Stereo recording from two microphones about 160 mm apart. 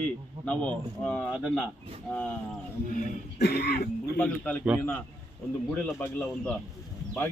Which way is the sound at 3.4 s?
90° left.